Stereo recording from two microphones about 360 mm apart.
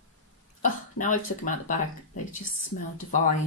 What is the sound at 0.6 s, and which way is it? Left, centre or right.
Speech, left.